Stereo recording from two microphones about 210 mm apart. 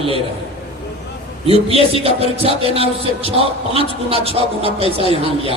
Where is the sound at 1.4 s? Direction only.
25° right (ahead or behind).